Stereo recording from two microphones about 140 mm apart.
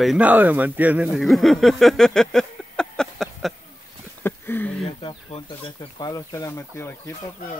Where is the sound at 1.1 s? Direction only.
Centre (ahead or behind).